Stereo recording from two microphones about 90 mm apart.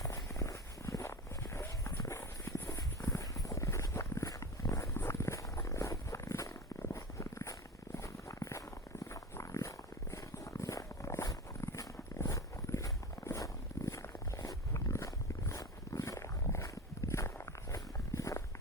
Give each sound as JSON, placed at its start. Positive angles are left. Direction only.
{"t": 0.0, "sound": "walk", "side_deg": 35}
{"t": 7.9, "sound": "a sound", "side_deg": 35}
{"t": 17.1, "sound": "walk", "side_deg": 30}